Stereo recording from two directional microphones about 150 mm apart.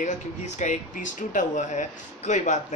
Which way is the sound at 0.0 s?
55° left (ahead or behind).